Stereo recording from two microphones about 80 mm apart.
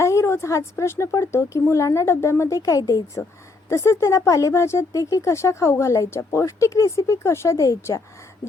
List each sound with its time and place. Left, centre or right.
0.0 s a woman's voice: left